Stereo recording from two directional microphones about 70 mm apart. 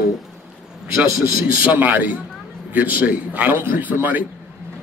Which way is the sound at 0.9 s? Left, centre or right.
Right.